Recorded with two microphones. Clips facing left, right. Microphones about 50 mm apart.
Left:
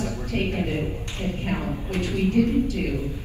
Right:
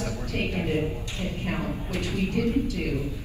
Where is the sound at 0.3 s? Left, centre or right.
Left.